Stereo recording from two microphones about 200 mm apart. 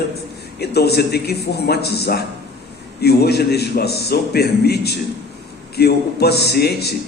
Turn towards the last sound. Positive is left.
turn(degrees=55)  # may be behind; listen again after turning